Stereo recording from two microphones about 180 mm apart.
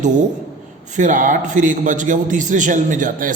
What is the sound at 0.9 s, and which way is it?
A man's voice, 45° right (ahead or behind).